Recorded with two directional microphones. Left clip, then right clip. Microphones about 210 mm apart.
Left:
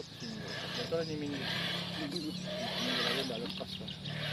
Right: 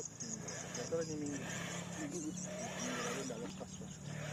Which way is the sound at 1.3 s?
Centre (ahead or behind).